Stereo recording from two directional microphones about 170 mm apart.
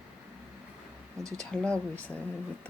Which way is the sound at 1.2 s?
20° right (ahead or behind).